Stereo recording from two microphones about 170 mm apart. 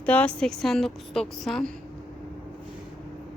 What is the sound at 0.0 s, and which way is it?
A woman's voice, 10° left (ahead or behind).